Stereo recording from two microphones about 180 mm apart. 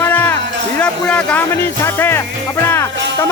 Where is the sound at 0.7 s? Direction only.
5° left (ahead or behind).